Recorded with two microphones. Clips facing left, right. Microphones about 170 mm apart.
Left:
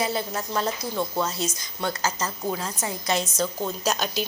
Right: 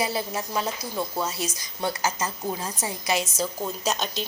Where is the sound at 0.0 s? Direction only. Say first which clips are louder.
Even; 10° right (ahead or behind).